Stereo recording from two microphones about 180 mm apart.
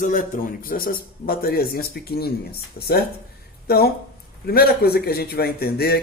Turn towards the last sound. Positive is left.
turn(degrees=60)  # may be behind; listen again after turning